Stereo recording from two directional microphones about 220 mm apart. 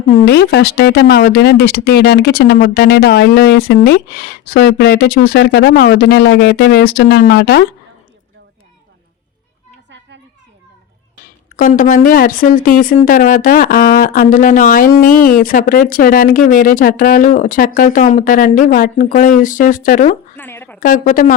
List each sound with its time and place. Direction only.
0.3 s speech: 45° left (ahead or behind)
11.5 s speech: 35° left (ahead or behind)
20.3 s a sound: 10° left (ahead or behind)
20.8 s speech: 35° left (ahead or behind)